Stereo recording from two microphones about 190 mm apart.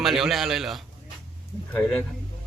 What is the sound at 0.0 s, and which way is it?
Speech, centre (ahead or behind).